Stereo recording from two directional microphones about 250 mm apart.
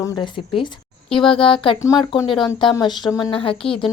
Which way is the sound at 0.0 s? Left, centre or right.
Centre.